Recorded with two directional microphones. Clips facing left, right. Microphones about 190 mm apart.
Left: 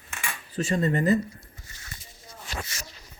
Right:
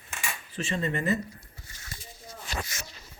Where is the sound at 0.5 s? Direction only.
40° left (ahead or behind).